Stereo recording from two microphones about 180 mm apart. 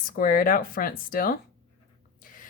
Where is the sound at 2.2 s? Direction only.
50° left (ahead or behind).